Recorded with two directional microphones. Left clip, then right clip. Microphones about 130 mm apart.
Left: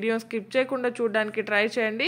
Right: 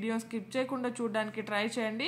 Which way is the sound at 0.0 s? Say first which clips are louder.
Left 9 dB; 40° left (ahead or behind).